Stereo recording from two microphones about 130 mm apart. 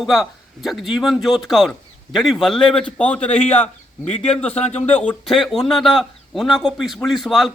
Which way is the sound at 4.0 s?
55° left (ahead or behind).